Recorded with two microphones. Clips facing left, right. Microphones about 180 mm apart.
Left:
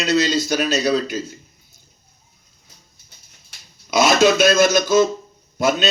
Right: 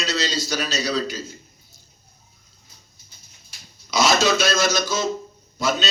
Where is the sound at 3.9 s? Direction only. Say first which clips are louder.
Left 5 dB; 55° left (ahead or behind).